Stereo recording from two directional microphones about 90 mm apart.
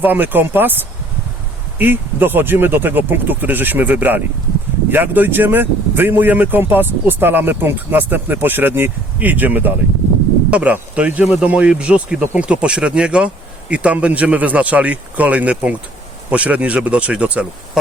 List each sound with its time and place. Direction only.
0.0 s speech: 20° right (ahead or behind)
1.8 s speech: 20° right (ahead or behind)